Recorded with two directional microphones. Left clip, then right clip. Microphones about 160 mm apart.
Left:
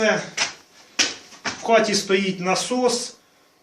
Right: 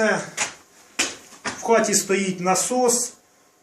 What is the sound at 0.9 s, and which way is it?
Speech, 5° right (ahead or behind).